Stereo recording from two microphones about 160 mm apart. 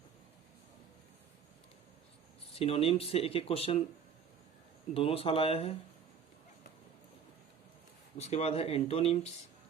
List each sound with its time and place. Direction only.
2.5 s speech: 35° left (ahead or behind)
4.9 s speech: 35° left (ahead or behind)
8.2 s speech: 40° left (ahead or behind)